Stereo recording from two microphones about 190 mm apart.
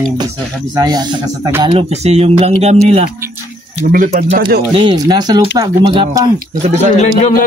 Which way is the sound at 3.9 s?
50° right (ahead or behind).